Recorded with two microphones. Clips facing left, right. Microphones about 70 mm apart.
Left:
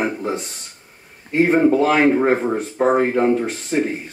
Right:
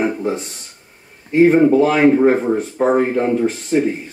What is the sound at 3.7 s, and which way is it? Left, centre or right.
Speech, left.